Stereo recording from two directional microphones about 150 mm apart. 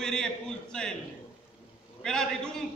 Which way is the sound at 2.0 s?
5° left (ahead or behind).